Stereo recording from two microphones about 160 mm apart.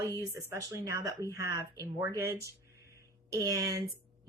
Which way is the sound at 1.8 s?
20° right (ahead or behind).